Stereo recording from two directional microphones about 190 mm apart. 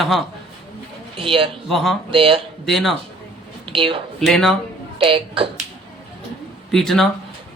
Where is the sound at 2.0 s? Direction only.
30° right (ahead or behind).